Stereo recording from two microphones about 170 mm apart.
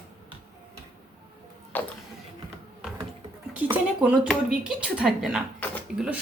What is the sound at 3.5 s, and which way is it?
Speech, 10° right (ahead or behind).